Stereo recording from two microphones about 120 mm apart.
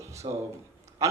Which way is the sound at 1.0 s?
25° right (ahead or behind).